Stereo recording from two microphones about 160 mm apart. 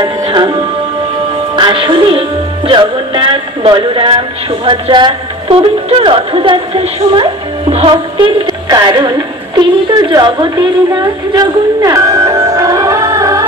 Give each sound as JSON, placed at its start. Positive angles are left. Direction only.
{"t": 0.0, "sound": "music", "side_deg": -25}
{"t": 1.6, "sound": "speech", "side_deg": -30}
{"t": 7.7, "sound": "music", "side_deg": -35}
{"t": 9.6, "sound": "a woman's voice", "side_deg": -25}